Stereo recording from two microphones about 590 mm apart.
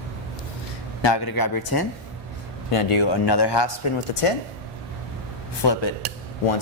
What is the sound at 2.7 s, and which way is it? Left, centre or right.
Speech, left.